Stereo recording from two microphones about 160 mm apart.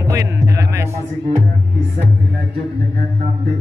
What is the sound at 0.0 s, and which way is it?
Music, 20° right (ahead or behind).